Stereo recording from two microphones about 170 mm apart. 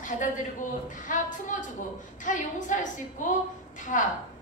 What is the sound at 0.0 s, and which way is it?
A woman's voice, 50° left (ahead or behind).